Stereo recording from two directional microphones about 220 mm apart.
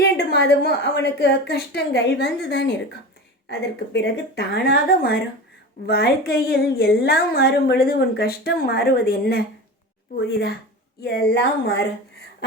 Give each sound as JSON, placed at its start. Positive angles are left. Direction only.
{"t": 0.0, "sound": "speech", "side_deg": 50}